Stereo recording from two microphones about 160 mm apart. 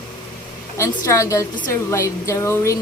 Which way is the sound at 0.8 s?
20° left (ahead or behind).